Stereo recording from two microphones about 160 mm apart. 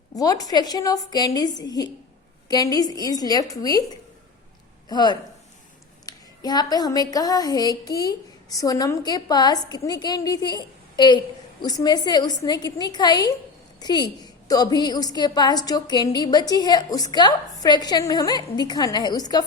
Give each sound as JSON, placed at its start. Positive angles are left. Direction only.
{"t": 0.1, "sound": "speech", "side_deg": 25}
{"t": 4.9, "sound": "speech", "side_deg": 25}